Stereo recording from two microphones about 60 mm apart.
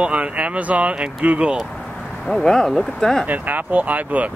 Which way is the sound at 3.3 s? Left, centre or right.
Right.